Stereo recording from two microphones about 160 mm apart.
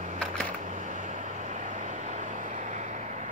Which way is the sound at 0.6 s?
50° right (ahead or behind).